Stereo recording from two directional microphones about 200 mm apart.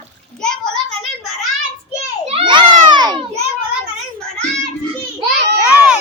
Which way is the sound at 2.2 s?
25° right (ahead or behind).